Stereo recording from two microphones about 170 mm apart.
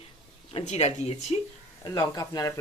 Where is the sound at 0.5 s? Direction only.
40° left (ahead or behind).